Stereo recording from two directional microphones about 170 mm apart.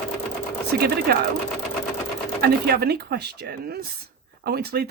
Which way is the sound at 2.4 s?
70° right (ahead or behind).